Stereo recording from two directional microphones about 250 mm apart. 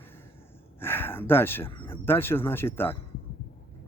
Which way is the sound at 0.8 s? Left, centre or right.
Centre.